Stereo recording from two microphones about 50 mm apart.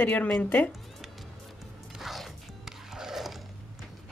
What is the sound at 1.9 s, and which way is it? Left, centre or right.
Music, centre.